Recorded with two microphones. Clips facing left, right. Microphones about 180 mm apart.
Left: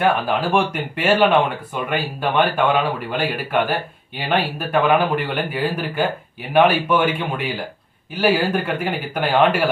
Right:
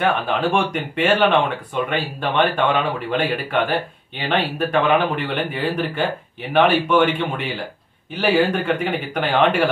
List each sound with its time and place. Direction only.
0.0 s a man's voice: centre (ahead or behind)